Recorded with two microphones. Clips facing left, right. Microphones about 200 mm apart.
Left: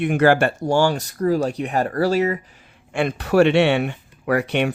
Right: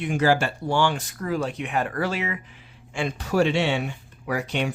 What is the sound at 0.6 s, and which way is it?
Speech, 40° left (ahead or behind).